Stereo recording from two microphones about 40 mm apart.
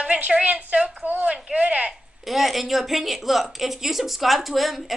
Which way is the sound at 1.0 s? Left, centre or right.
Right.